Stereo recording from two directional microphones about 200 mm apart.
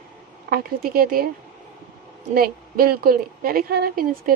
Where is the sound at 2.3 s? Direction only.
45° right (ahead or behind).